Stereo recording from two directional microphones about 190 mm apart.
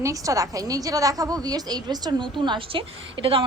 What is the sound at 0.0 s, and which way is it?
A woman's voice, 15° right (ahead or behind).